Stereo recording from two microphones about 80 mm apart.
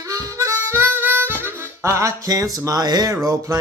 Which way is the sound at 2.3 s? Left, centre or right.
Right.